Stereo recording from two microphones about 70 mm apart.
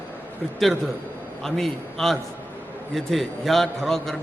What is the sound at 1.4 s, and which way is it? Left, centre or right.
A man's voice, centre.